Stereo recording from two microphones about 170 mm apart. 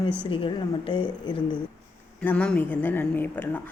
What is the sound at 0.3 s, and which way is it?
A woman's voice, 30° left (ahead or behind).